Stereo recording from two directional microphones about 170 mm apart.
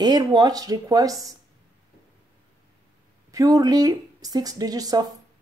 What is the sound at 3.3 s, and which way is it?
Speech, 20° right (ahead or behind).